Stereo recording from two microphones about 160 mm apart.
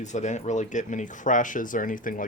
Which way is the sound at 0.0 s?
50° left (ahead or behind).